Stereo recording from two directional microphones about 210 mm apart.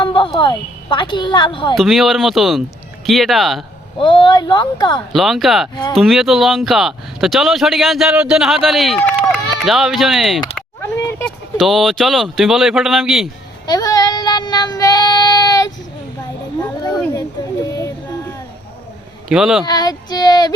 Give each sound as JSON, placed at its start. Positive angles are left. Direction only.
{"t": 0.0, "sound": "a woman's voice", "side_deg": 25}
{"t": 1.7, "sound": "speech", "side_deg": 0}
{"t": 3.9, "sound": "speech", "side_deg": 25}
{"t": 5.1, "sound": "speech", "side_deg": 0}
{"t": 13.7, "sound": "child singing", "side_deg": 15}
{"t": 16.6, "sound": "a sound", "side_deg": 20}
{"t": 19.3, "sound": "speech", "side_deg": -5}
{"t": 19.6, "sound": "speech", "side_deg": 20}